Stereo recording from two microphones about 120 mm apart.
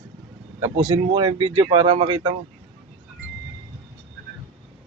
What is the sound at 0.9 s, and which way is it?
Speech, 40° right (ahead or behind).